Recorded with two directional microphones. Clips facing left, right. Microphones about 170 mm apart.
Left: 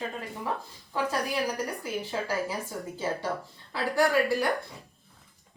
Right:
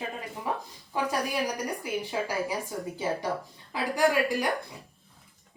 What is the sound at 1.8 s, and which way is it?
Speech, 15° right (ahead or behind).